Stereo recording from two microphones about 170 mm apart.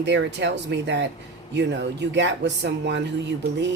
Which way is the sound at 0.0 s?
90° right.